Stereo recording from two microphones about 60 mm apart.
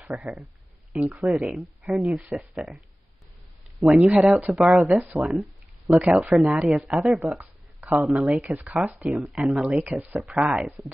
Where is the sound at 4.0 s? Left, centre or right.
Right.